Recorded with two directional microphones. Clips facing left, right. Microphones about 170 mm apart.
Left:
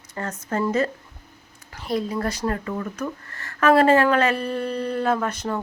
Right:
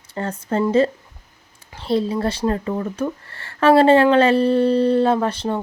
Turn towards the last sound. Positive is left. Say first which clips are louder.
# right 4 dB
turn(degrees=-30)  # may be behind; listen again after turning